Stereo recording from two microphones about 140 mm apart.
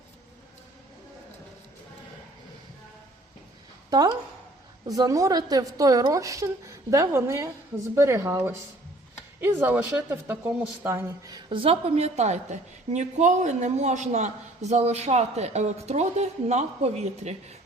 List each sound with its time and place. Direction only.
3.8 s a woman's voice: 30° right (ahead or behind)
9.4 s speech: 15° right (ahead or behind)
11.4 s a woman's voice: 40° right (ahead or behind)